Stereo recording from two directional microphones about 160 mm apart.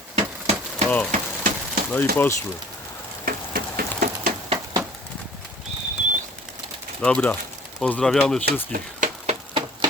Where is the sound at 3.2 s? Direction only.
60° right (ahead or behind).